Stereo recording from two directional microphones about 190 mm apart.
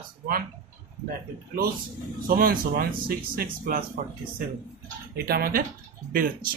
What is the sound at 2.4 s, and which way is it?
Speech, 50° right (ahead or behind).